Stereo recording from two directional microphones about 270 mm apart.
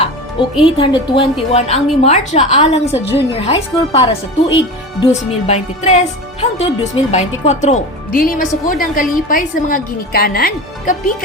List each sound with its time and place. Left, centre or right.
0.6 s a woman's voice: centre